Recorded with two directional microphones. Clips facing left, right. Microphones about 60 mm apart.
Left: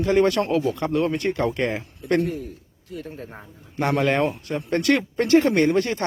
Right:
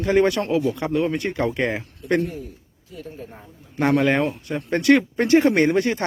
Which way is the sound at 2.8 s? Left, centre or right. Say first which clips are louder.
Left 2 dB; left.